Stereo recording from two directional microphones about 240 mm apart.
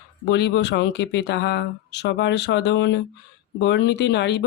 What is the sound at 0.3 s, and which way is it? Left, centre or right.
Speech, left.